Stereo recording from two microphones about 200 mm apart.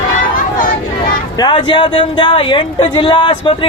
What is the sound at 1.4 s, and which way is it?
Speech, 25° left (ahead or behind).